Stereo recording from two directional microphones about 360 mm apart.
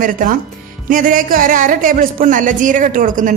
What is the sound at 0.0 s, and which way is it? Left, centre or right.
A woman's voice, right.